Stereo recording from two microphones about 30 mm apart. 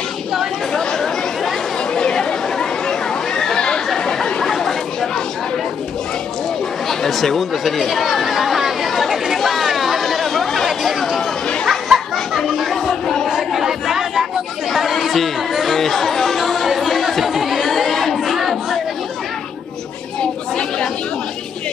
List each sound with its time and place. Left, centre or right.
0.7 s chatter: centre
2.0 s chatter: left; by 5.2 s centre
6.9 s speech: centre
8.8 s chatter: centre
11.9 s chatter: centre
12.7 s a sound: centre
13.3 s a sound: centre
14.9 s chatter: centre
17.6 s chatter: centre